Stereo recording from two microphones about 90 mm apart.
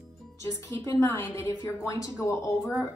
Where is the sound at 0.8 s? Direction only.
35° left (ahead or behind).